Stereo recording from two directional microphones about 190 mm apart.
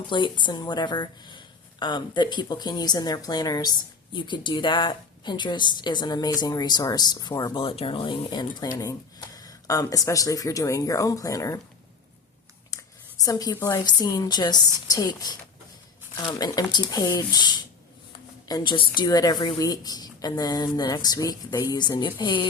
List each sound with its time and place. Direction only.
0.1 s speech: 25° left (ahead or behind)
12.7 s a sound: 20° left (ahead or behind)
13.2 s speech: 20° left (ahead or behind)